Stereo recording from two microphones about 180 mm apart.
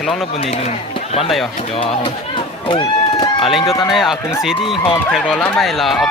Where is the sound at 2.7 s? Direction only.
25° left (ahead or behind).